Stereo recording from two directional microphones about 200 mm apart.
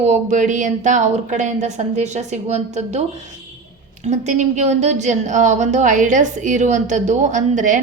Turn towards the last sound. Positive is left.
turn(degrees=-40)  # may be behind; listen again after turning